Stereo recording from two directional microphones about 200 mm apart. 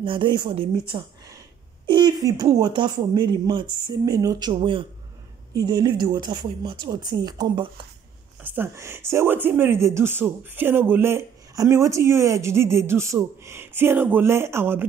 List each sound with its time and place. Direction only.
0.0 s speech: 25° right (ahead or behind)
8.4 s speech: 10° right (ahead or behind)